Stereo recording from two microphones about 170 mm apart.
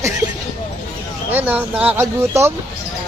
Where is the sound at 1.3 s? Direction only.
10° right (ahead or behind).